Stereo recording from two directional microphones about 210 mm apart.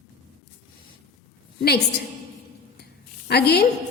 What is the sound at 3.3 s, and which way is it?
Speech, 50° left (ahead or behind).